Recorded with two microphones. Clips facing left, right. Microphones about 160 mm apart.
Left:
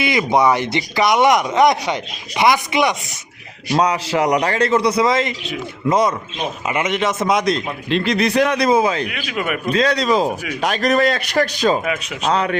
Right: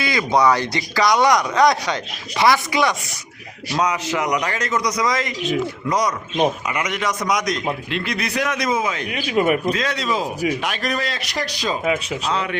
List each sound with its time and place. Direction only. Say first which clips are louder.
0.0 s speech: left 2 dB; 20° left (ahead or behind)
3.7 s a man's voice: left 4 dB; 35° left (ahead or behind)
9.0 s speech: right 5 dB; 35° right (ahead or behind)
9.7 s a man's voice: left 6 dB; 35° left (ahead or behind); by 11.8 s 55° left (ahead or behind)
12.3 s speech: left 6 dB; 40° left (ahead or behind)